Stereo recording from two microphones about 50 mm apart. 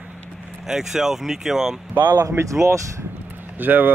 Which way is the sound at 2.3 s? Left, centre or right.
Right.